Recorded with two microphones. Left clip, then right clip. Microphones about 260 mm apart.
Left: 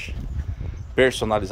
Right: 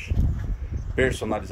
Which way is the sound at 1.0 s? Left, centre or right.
Centre.